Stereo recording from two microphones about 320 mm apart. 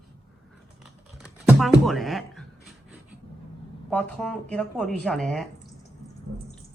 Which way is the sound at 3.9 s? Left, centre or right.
Centre.